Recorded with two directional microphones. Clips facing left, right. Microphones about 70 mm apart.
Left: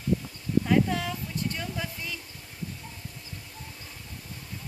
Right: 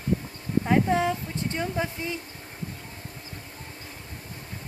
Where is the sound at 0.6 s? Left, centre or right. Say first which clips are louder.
Right 5 dB; right.